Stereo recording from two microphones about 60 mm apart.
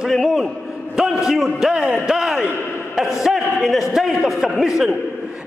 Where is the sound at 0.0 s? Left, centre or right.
Centre.